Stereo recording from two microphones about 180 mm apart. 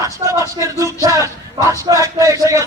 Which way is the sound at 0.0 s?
20° right (ahead or behind).